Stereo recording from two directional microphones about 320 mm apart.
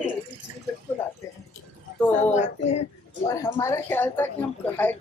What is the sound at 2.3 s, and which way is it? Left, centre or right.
Speech, left.